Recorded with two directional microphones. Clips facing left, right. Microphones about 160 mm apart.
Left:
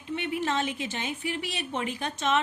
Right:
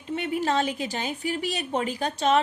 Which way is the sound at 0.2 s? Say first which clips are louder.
Right 4 dB; 40° right (ahead or behind).